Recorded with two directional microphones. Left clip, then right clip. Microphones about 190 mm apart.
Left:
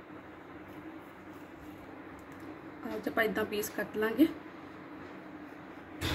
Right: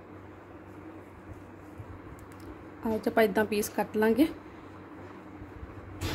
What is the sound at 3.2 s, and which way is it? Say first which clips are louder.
A woman's voice: right 5 dB; 50° right (ahead or behind).